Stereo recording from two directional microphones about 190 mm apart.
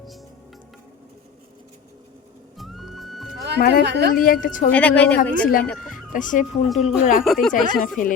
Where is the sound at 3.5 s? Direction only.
55° left (ahead or behind).